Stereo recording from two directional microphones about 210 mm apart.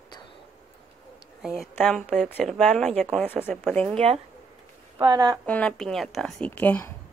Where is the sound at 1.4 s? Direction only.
Centre (ahead or behind).